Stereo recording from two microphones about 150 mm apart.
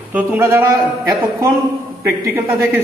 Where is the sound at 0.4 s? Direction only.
20° right (ahead or behind).